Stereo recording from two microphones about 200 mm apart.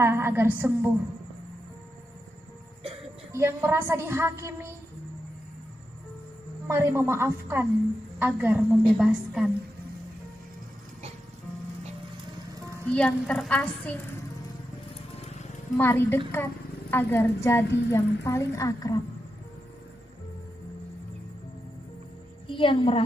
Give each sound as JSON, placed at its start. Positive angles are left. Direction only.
{"t": 0.0, "sound": "a woman's voice", "side_deg": -10}
{"t": 3.3, "sound": "a woman's voice", "side_deg": -15}
{"t": 6.7, "sound": "a woman's voice", "side_deg": -15}
{"t": 12.9, "sound": "a woman's voice", "side_deg": 5}
{"t": 15.2, "sound": "music", "side_deg": 35}
{"t": 15.8, "sound": "a woman's voice", "side_deg": 10}
{"t": 22.4, "sound": "a woman's voice", "side_deg": 25}